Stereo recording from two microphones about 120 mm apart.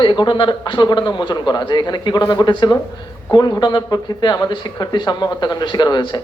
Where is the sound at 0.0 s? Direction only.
40° left (ahead or behind).